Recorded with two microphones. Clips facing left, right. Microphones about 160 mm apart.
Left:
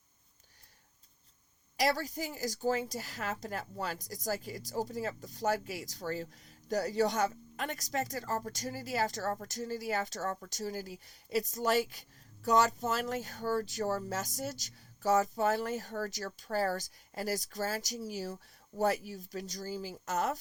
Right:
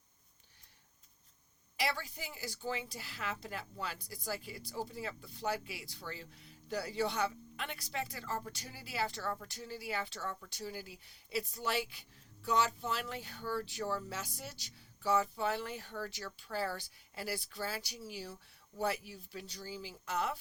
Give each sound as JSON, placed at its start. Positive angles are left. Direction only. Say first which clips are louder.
{"t": 1.7, "sound": "a woman's voice", "louder": "left 7 dB", "side_deg": 40}